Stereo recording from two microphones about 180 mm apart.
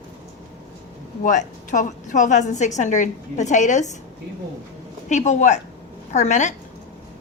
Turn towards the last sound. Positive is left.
turn(degrees=40)  # may be behind; listen again after turning